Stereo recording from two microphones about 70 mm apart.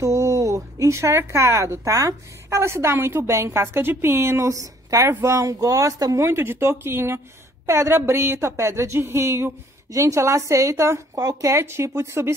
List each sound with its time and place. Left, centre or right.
0.0 s speech: right
6.2 s speech: right